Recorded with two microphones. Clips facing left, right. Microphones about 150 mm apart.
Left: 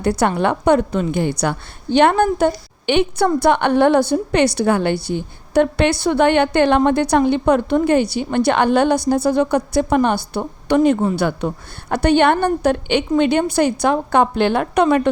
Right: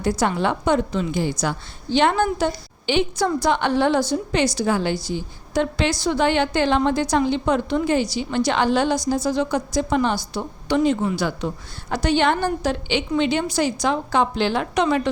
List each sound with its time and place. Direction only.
0.0 s a woman's voice: 60° left (ahead or behind)